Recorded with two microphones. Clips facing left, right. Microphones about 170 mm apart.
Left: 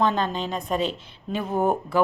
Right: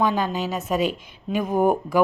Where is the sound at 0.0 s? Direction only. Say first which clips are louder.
Right 1 dB; 10° right (ahead or behind).